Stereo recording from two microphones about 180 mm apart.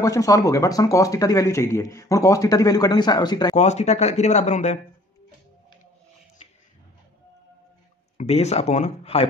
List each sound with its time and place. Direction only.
0.0 s speech: 20° left (ahead or behind)
3.5 s speech: 40° left (ahead or behind)
8.2 s speech: 35° left (ahead or behind)